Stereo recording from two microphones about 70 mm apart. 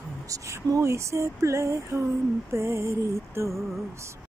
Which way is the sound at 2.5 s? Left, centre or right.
Right.